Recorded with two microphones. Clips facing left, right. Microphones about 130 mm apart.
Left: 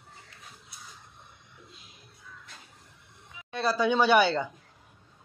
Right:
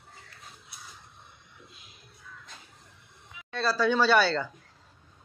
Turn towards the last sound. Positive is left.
turn(degrees=20)  # may be behind; listen again after turning